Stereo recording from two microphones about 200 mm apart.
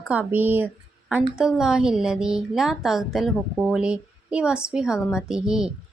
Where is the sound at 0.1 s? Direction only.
10° right (ahead or behind).